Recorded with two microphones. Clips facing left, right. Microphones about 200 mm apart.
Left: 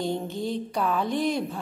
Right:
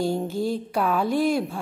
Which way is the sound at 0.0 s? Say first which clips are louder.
Right 4 dB; 5° right (ahead or behind).